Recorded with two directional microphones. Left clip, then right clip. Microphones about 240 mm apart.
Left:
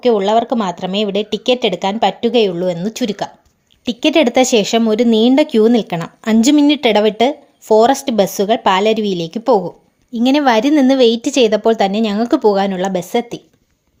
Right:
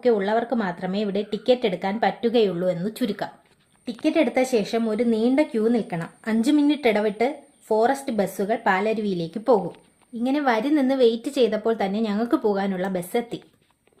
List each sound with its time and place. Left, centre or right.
0.0 s speech: left